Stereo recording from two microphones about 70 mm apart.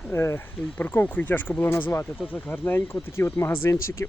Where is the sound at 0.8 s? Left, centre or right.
Left.